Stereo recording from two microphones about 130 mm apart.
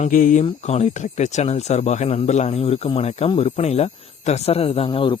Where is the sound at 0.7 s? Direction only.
65° left (ahead or behind).